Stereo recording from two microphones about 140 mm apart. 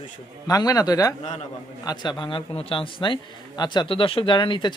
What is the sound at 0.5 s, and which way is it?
A man's voice, 25° left (ahead or behind).